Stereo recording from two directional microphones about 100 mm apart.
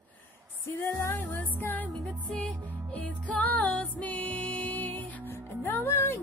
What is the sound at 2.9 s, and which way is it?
Music, 15° left (ahead or behind).